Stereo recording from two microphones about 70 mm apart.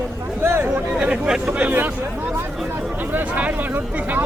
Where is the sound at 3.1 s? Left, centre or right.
Right.